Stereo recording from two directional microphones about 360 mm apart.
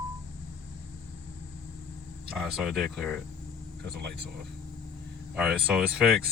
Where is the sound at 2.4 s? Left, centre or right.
Centre.